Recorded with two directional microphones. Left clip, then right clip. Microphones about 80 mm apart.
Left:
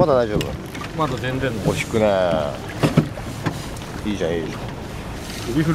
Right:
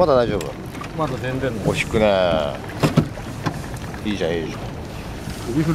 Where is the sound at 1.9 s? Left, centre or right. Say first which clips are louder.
Right 1 dB; right.